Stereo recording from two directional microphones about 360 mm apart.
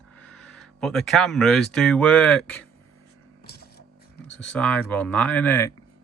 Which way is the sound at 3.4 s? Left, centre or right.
Left.